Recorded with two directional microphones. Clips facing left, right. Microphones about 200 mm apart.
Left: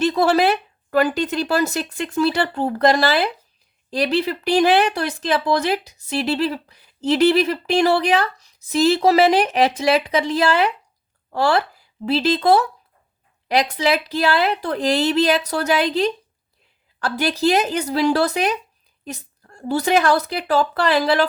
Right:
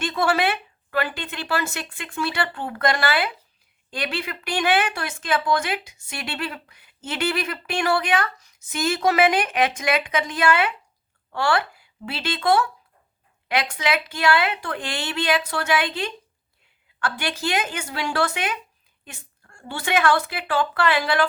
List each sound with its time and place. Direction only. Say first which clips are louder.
0.0 s speech: left 6 dB; 35° left (ahead or behind)